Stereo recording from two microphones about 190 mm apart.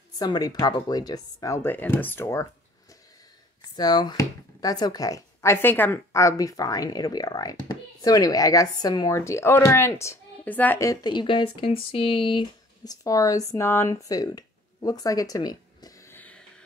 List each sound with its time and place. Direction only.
0.2 s speech: 20° left (ahead or behind)
3.7 s speech: 20° left (ahead or behind)
13.5 s a sound: 15° left (ahead or behind)